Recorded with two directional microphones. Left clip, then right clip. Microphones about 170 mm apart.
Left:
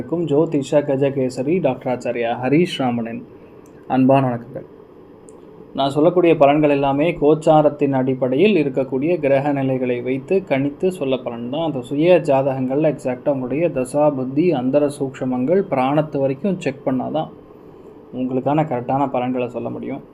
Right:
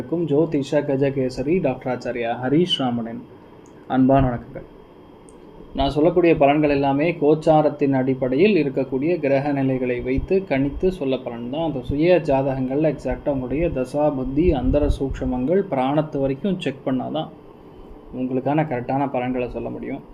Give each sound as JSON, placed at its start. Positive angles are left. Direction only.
{"t": 0.1, "sound": "speech", "side_deg": 25}
{"t": 5.7, "sound": "speech", "side_deg": 25}
{"t": 18.3, "sound": "speech", "side_deg": 20}